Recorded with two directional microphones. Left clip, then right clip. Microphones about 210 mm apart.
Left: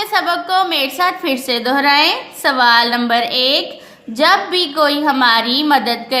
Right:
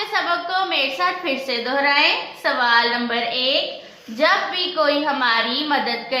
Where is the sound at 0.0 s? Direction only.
50° left (ahead or behind).